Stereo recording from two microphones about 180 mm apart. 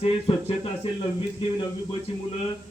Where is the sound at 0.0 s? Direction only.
30° left (ahead or behind).